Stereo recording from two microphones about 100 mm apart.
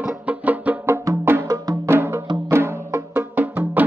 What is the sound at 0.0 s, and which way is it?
Music, 15° right (ahead or behind).